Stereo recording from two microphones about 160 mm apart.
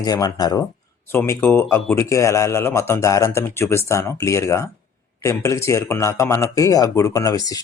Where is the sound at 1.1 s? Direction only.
15° left (ahead or behind).